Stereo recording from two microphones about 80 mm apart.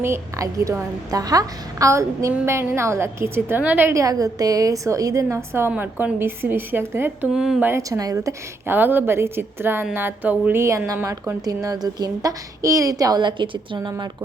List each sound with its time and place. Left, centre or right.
0.3 s a woman's voice: right
1.1 s a woman's voice: right
3.9 s a woman's voice: right
5.7 s a woman's voice: right
7.3 s speech: centre
7.8 s a woman's voice: right
8.6 s a woman's voice: right